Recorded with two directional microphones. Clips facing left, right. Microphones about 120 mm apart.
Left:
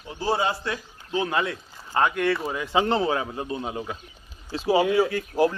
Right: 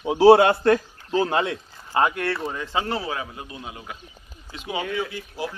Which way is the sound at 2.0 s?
Centre (ahead or behind).